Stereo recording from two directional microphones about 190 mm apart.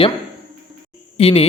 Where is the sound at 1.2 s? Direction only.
30° left (ahead or behind).